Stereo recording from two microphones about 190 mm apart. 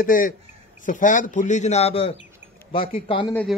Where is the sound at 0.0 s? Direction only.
45° left (ahead or behind); by 3.3 s 30° left (ahead or behind).